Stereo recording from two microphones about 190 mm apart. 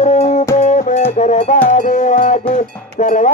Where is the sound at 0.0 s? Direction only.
35° left (ahead or behind).